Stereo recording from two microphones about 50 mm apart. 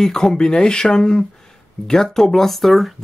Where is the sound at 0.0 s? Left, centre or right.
Centre.